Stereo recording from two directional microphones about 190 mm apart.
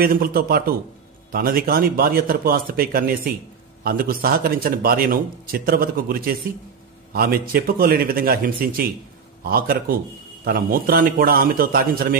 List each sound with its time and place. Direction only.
0.0 s speech: 50° right (ahead or behind)